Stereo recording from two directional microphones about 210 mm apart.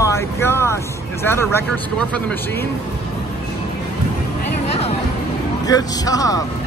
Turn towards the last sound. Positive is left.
turn(degrees=15)  # may be behind; listen again after turning